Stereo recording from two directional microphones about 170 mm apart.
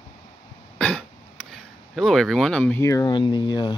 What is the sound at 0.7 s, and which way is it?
Cough, 5° left (ahead or behind).